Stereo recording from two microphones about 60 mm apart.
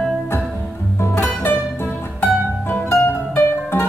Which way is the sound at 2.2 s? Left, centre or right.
Left.